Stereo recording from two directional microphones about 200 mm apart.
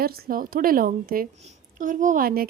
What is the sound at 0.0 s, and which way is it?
Speech, 50° right (ahead or behind).